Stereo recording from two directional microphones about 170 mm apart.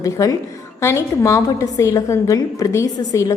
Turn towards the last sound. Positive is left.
turn(degrees=15)  # may be behind; listen again after turning